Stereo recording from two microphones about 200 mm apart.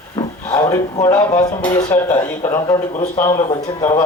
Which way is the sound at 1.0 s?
20° left (ahead or behind).